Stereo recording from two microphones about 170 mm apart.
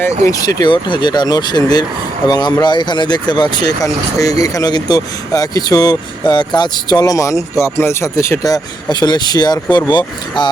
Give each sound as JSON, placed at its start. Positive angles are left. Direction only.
{"t": 0.3, "sound": "speech", "side_deg": 20}